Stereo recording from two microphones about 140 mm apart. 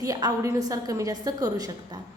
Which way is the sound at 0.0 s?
25° right (ahead or behind).